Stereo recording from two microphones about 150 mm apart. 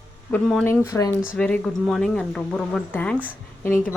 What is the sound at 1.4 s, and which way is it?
A woman's voice, 5° left (ahead or behind).